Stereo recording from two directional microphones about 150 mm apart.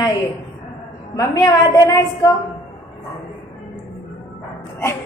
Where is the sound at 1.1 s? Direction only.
25° left (ahead or behind).